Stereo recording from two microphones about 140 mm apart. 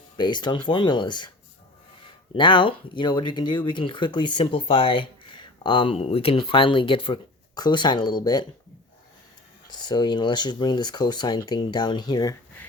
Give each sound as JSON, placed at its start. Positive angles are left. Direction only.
{"t": 0.2, "sound": "speech", "side_deg": 30}
{"t": 2.3, "sound": "speech", "side_deg": 35}
{"t": 9.7, "sound": "speech", "side_deg": 30}